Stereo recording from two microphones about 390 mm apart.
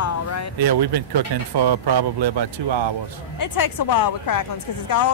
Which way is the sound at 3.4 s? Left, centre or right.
Left.